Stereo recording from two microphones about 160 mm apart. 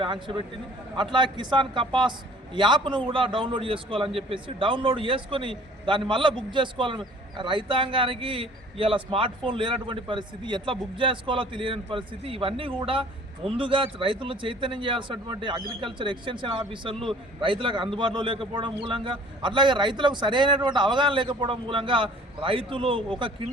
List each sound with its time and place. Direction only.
0.0 s a man's voice: 30° right (ahead or behind)